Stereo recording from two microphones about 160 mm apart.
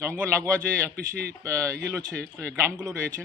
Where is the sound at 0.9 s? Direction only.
75° right (ahead or behind).